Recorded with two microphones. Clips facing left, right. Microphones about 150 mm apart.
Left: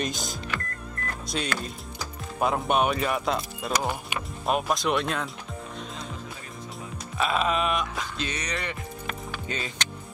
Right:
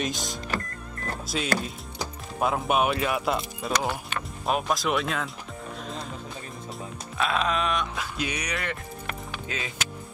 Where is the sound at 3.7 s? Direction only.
10° left (ahead or behind).